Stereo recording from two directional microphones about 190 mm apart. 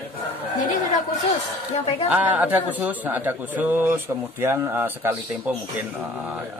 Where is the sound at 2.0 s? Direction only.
10° right (ahead or behind).